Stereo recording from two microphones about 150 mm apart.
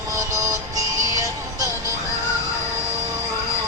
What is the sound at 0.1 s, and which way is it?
Music, 20° right (ahead or behind).